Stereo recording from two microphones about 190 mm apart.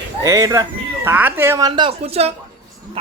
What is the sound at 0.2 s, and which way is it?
A man's voice, 15° right (ahead or behind).